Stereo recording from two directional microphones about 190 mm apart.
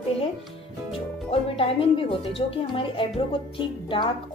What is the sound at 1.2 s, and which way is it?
Speech, 30° left (ahead or behind).